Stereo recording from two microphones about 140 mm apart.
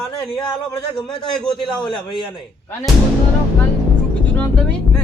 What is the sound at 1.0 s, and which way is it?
Speech, 5° left (ahead or behind).